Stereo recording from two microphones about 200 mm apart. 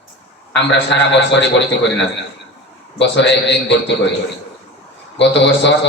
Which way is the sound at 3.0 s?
60° left (ahead or behind).